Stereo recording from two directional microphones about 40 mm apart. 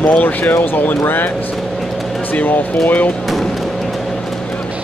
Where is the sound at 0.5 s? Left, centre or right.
Left.